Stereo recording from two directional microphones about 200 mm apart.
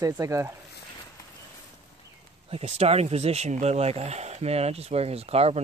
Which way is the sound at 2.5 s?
30° right (ahead or behind).